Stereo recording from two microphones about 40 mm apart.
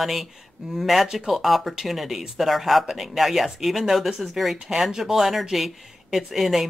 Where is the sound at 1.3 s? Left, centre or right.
Centre.